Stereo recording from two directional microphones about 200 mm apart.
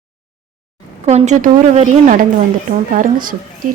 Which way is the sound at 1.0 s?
35° right (ahead or behind).